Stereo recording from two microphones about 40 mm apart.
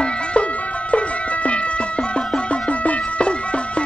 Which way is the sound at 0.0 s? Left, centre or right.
Left.